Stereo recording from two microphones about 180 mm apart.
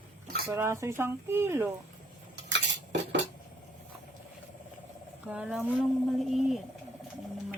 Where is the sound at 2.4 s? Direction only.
75° right (ahead or behind).